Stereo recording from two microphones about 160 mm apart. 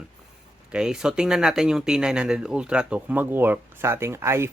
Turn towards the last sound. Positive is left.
turn(degrees=-15)  # may be behind; listen again after turning